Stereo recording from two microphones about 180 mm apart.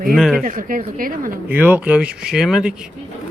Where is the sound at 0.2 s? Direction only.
Centre (ahead or behind).